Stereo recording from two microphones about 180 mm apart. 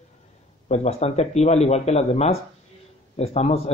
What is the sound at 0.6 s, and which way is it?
A man's voice, 40° left (ahead or behind).